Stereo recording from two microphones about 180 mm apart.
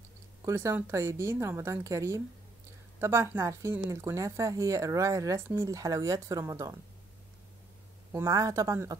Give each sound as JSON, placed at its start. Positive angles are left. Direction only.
{"t": 0.5, "sound": "a woman's voice", "side_deg": -15}
{"t": 8.1, "sound": "a woman's voice", "side_deg": -20}